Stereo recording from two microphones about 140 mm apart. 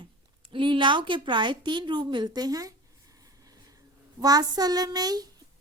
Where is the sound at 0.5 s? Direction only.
35° right (ahead or behind).